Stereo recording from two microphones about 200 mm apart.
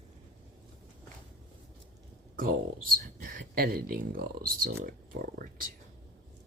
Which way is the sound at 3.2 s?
45° right (ahead or behind).